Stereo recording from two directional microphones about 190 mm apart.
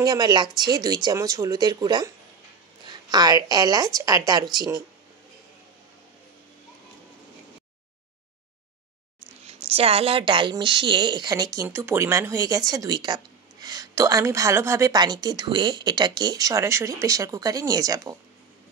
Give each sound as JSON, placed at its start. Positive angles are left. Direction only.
{"t": 0.0, "sound": "speech", "side_deg": -20}
{"t": 9.5, "sound": "speech", "side_deg": -30}